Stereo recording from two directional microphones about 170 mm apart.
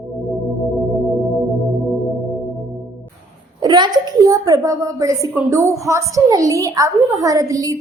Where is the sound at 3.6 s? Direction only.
25° right (ahead or behind).